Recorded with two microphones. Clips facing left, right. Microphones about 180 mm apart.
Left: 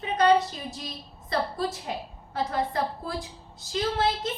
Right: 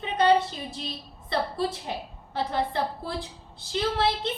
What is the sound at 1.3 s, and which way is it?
A woman's voice, 30° right (ahead or behind).